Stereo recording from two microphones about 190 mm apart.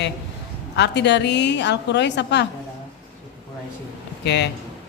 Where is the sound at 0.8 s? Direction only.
65° left (ahead or behind).